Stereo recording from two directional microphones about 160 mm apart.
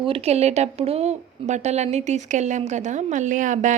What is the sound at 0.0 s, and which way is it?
Speech, 35° right (ahead or behind).